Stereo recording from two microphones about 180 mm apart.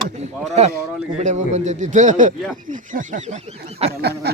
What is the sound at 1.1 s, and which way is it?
A man's voice, 40° right (ahead or behind).